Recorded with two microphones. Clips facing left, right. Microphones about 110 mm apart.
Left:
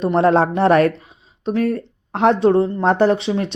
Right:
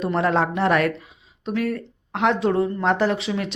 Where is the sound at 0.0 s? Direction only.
30° left (ahead or behind).